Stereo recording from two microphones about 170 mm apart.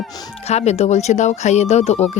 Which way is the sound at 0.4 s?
40° left (ahead or behind).